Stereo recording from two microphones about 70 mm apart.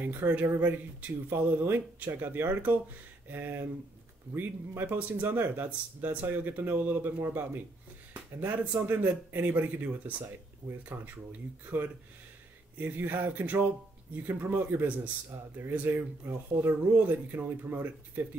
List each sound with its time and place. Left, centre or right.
0.0 s speech: right
12.7 s speech: right
15.3 s speech: right
15.7 s speech: right